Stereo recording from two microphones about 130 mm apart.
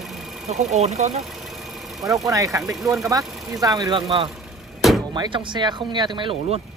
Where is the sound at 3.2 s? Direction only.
Centre (ahead or behind).